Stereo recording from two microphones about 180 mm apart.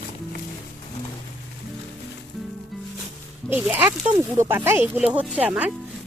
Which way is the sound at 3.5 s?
10° right (ahead or behind).